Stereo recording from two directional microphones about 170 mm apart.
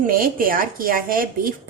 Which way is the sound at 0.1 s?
55° right (ahead or behind).